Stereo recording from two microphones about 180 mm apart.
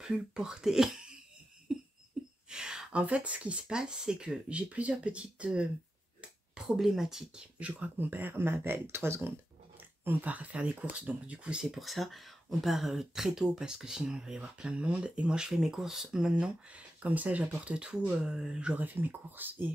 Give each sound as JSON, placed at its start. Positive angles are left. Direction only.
{"t": 0.0, "sound": "speech", "side_deg": -5}
{"t": 1.7, "sound": "a sound", "side_deg": -5}
{"t": 2.5, "sound": "speech", "side_deg": -5}